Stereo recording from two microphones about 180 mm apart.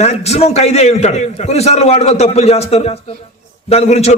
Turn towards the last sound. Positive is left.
turn(degrees=35)  # may be behind; listen again after turning